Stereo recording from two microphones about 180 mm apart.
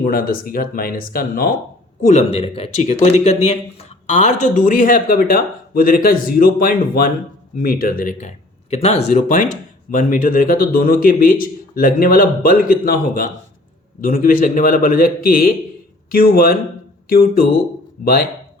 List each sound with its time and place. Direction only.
0.0 s speech: 50° left (ahead or behind)
8.7 s speech: 35° left (ahead or behind); by 18.3 s 55° left (ahead or behind)